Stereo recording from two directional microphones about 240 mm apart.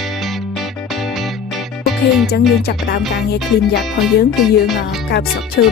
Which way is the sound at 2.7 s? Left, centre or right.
Left.